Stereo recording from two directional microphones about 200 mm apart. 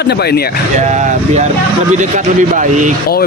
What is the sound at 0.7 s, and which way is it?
Speech, 35° right (ahead or behind).